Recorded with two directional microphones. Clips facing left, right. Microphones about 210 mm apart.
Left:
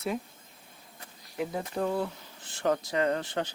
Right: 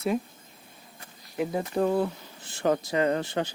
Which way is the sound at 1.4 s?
20° right (ahead or behind).